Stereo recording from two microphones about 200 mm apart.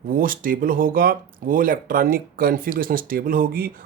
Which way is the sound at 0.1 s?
45° right (ahead or behind).